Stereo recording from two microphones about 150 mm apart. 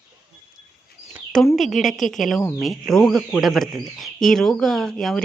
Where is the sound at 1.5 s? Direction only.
Centre (ahead or behind).